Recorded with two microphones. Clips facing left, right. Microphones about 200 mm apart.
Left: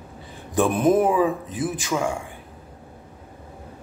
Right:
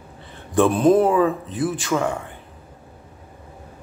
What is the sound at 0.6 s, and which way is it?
Speech, 20° left (ahead or behind).